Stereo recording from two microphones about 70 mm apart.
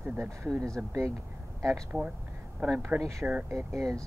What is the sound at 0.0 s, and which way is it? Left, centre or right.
Speech, right.